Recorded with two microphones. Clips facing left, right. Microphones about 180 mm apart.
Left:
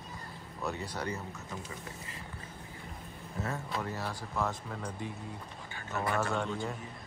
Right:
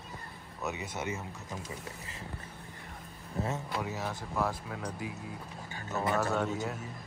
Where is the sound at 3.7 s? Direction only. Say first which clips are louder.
Right 1 dB; 5° right (ahead or behind).